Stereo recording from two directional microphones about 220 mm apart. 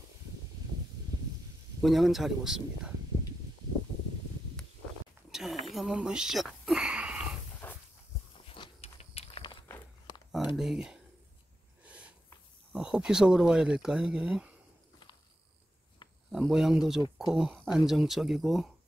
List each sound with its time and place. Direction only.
1.8 s speech: centre (ahead or behind)
5.3 s a sound: centre (ahead or behind)
7.6 s dog: 10° left (ahead or behind)
8.5 s walk: 25° left (ahead or behind)
10.5 s speech: centre (ahead or behind)
11.8 s a sound: 5° right (ahead or behind)
12.7 s speech: 5° right (ahead or behind)
16.3 s speech: centre (ahead or behind)